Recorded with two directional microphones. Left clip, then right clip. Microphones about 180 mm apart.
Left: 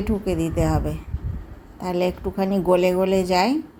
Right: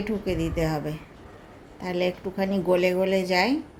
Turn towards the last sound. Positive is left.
turn(degrees=15)  # may be behind; listen again after turning